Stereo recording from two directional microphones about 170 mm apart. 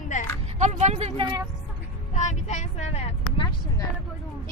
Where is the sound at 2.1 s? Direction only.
45° left (ahead or behind).